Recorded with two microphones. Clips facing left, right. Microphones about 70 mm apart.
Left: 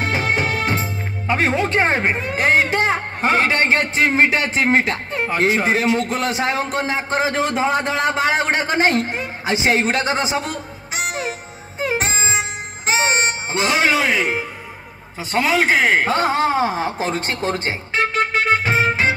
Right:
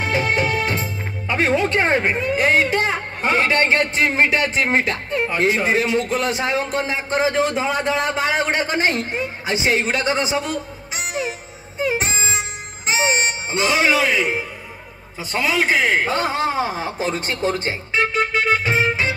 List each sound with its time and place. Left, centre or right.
0.0 s speech: left
11.1 s music: left
11.8 s harmonica: left
12.8 s music: left
15.1 s a man's voice: left